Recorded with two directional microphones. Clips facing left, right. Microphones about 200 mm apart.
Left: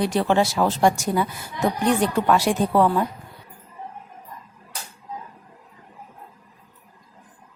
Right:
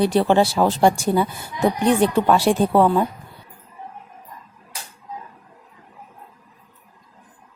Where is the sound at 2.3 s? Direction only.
30° right (ahead or behind).